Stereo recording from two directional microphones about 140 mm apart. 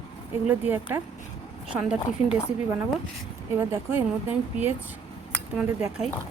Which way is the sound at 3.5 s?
15° right (ahead or behind).